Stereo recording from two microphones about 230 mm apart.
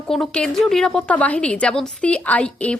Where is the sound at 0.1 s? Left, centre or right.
Centre.